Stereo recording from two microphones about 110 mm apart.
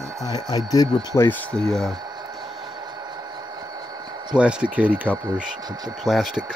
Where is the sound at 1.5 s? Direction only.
5° left (ahead or behind).